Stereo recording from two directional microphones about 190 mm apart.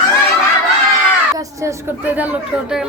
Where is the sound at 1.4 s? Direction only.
15° right (ahead or behind).